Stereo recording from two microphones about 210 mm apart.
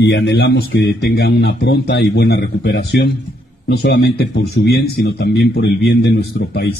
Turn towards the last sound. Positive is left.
turn(degrees=55)  # may be behind; listen again after turning